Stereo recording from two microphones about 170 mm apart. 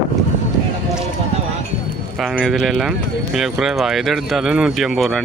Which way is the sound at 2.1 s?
5° right (ahead or behind).